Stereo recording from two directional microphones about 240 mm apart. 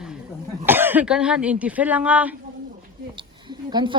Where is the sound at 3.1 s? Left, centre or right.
Centre.